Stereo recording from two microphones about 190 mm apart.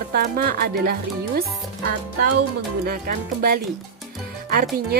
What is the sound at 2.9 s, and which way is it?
Speech, 55° right (ahead or behind).